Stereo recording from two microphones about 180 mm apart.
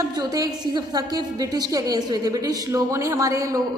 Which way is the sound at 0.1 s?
20° right (ahead or behind).